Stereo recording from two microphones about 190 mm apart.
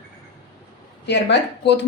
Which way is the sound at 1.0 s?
65° left (ahead or behind).